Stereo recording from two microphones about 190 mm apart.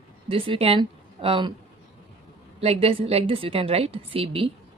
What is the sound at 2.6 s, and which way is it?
A woman's voice, 30° right (ahead or behind).